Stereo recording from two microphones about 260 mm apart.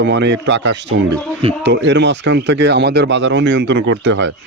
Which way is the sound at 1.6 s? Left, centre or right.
Right.